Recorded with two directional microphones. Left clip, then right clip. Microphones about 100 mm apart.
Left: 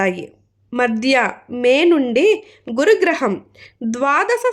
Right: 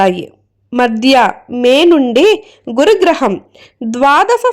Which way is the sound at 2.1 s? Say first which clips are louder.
Right 6 dB; 50° right (ahead or behind).